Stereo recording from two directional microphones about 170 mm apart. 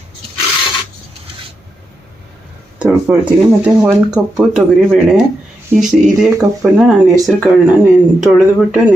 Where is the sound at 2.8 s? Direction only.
5° right (ahead or behind).